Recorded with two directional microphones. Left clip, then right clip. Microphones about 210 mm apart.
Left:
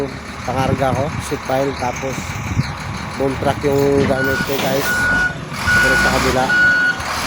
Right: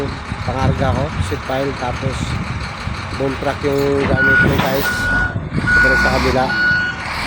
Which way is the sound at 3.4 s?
10° left (ahead or behind).